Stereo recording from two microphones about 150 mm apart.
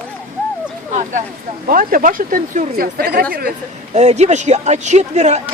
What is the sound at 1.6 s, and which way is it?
Speech, 70° right (ahead or behind).